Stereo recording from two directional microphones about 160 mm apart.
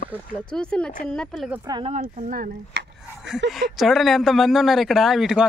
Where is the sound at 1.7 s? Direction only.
30° right (ahead or behind).